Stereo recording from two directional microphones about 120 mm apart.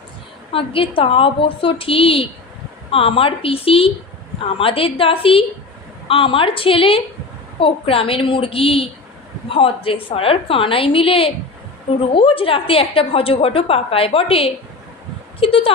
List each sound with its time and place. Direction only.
0.5 s a woman's voice: 50° left (ahead or behind)